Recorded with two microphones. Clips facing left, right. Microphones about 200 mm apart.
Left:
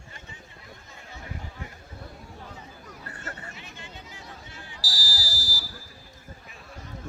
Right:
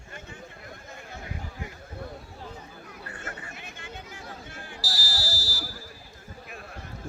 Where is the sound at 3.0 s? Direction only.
40° left (ahead or behind).